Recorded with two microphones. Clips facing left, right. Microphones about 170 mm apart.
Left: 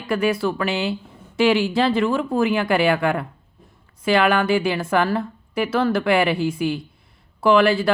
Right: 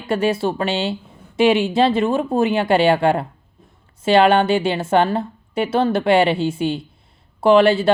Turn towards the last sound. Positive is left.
turn(degrees=-25)  # may be behind; listen again after turning